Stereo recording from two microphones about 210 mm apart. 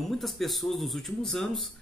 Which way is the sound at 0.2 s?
Centre (ahead or behind).